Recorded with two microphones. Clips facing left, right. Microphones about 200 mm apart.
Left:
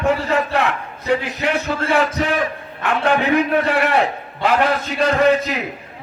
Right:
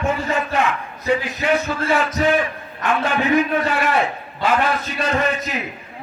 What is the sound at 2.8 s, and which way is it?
A man's voice, 65° left (ahead or behind).